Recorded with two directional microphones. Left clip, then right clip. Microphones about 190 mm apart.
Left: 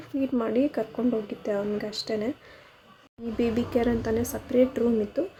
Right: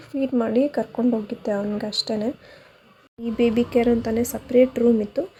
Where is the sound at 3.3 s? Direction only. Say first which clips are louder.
Right 6 dB; 15° right (ahead or behind).